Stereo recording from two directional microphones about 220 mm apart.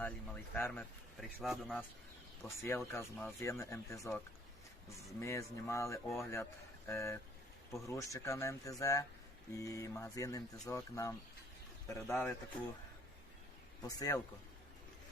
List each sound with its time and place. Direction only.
0.0 s speech: 10° left (ahead or behind)
2.6 s speech: 10° left (ahead or behind)
5.2 s speech: 15° left (ahead or behind)
13.8 s speech: 15° left (ahead or behind)